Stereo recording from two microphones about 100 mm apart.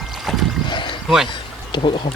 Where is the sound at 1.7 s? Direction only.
55° left (ahead or behind).